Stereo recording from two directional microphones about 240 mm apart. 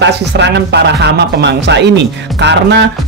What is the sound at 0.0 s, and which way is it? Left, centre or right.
Speech, right.